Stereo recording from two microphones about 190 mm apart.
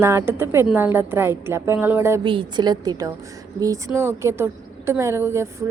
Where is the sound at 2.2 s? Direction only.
25° right (ahead or behind).